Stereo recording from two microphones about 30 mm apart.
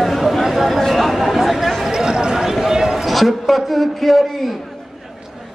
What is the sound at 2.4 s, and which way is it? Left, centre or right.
Basketball bounce, centre.